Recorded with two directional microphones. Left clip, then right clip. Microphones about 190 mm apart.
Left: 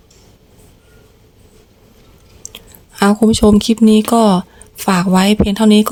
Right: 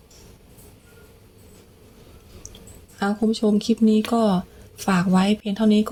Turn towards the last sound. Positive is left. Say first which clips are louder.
# left 9 dB
turn(degrees=25)  # may be behind; listen again after turning